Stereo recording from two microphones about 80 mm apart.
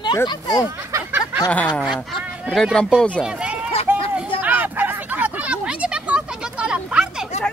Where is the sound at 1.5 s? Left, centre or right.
Centre.